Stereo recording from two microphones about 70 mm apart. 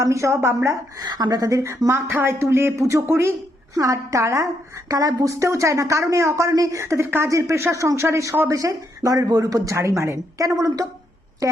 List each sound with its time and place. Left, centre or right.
0.0 s speech: right
1.0 s speech: right
3.8 s speech: right
9.7 s speech: right